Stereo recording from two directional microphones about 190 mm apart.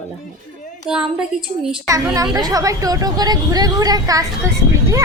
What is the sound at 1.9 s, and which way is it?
Speech, 15° right (ahead or behind).